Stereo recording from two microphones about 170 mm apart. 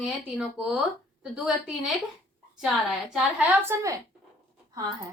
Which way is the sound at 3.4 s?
10° right (ahead or behind).